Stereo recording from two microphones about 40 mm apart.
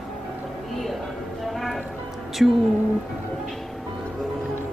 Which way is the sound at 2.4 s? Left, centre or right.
Centre.